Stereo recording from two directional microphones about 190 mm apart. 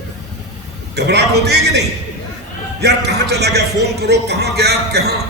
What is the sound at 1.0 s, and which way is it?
Speech, 60° right (ahead or behind).